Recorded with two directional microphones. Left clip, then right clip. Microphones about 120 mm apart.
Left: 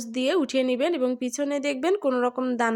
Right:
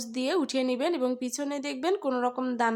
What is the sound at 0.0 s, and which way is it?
A woman's voice, 15° left (ahead or behind).